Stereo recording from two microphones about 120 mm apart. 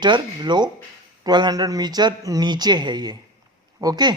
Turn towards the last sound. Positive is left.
turn(degrees=-35)  # may be behind; listen again after turning